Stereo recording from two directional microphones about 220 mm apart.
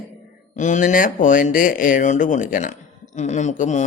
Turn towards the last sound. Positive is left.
turn(degrees=35)  # may be behind; listen again after turning